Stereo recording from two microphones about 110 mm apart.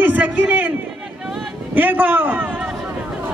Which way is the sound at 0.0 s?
15° right (ahead or behind).